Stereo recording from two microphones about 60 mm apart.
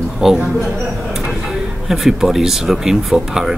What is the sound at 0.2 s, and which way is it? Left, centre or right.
Speech, centre.